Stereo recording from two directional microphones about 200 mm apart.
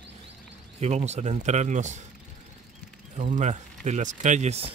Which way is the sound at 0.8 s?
35° right (ahead or behind).